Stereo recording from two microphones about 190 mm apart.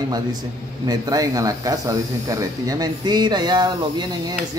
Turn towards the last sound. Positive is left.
turn(degrees=-20)  # may be behind; listen again after turning